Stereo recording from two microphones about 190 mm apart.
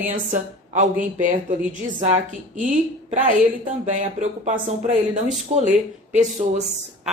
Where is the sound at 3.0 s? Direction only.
40° right (ahead or behind).